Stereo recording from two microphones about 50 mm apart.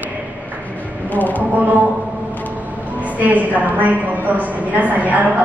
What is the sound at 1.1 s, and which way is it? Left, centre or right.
Speech, left.